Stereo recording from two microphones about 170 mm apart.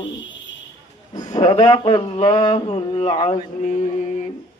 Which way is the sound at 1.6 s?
30° left (ahead or behind).